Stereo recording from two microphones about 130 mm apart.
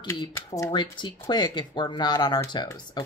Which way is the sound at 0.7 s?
40° left (ahead or behind).